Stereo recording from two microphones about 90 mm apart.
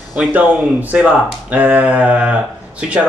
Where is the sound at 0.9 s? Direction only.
15° right (ahead or behind).